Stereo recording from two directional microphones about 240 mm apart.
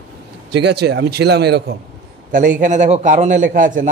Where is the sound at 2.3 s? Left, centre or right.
Right.